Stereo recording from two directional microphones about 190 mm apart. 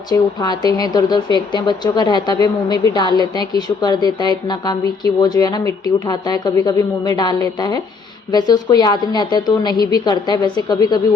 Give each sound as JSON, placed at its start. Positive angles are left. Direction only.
{"t": 0.1, "sound": "a woman's voice", "side_deg": 20}